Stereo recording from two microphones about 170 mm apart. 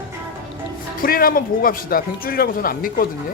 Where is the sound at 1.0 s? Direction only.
60° left (ahead or behind).